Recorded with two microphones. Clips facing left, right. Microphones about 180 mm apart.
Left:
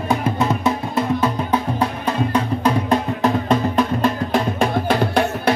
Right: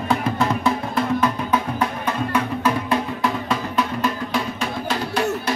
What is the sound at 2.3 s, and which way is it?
Music, 35° left (ahead or behind).